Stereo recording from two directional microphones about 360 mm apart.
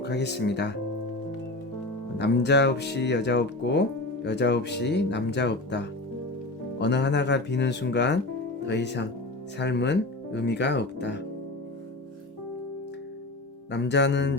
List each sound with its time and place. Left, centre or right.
0.0 s speech: left
2.1 s speech: left
13.7 s speech: left